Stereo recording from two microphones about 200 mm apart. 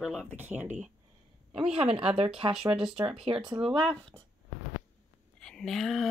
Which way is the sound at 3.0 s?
25° right (ahead or behind).